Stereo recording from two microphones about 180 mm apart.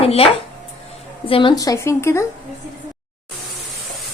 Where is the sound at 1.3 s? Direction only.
30° left (ahead or behind).